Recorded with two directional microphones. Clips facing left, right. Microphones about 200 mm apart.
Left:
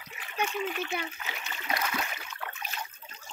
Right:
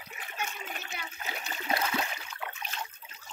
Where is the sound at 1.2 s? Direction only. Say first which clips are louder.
Right 2 dB; 35° right (ahead or behind).